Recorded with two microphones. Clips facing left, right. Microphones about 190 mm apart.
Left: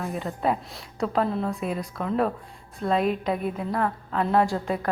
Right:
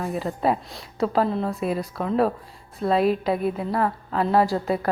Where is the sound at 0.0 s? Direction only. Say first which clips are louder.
Right 3 dB; centre (ahead or behind).